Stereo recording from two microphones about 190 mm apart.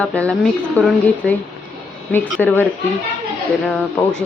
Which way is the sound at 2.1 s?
10° left (ahead or behind).